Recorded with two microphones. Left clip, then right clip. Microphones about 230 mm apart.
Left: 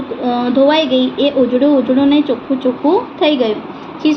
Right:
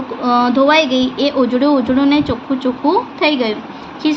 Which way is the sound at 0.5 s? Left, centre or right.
Right.